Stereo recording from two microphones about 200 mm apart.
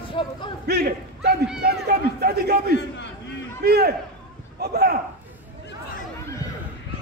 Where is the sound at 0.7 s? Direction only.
55° right (ahead or behind).